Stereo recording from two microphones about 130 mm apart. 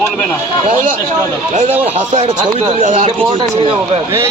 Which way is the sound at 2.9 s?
45° right (ahead or behind).